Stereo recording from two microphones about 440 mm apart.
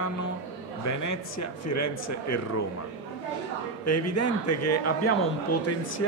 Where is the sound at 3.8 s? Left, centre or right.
Left.